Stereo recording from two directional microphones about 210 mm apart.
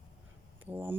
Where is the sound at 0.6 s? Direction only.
10° right (ahead or behind).